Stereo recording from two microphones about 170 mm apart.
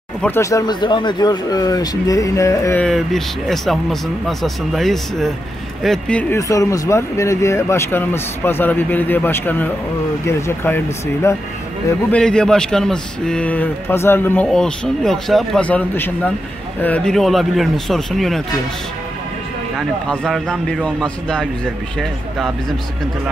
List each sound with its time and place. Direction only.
0.2 s speech: 15° left (ahead or behind)
2.8 s speech: centre (ahead or behind)
6.5 s speech: 20° left (ahead or behind)
12.1 s speech: 5° left (ahead or behind)
20.1 s speech: 5° left (ahead or behind)